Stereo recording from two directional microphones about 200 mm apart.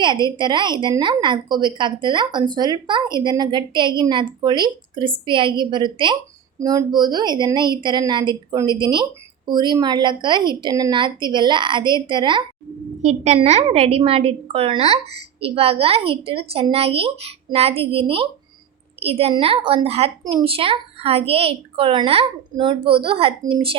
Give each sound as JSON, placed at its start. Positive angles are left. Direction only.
{"t": 0.0, "sound": "a woman's voice", "side_deg": -20}
{"t": 13.0, "sound": "a woman's voice", "side_deg": -35}